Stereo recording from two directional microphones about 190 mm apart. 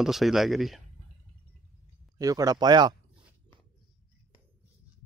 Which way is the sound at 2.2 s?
20° right (ahead or behind).